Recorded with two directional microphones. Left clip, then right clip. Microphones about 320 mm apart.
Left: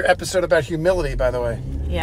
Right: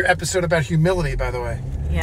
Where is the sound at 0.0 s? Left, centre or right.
Left.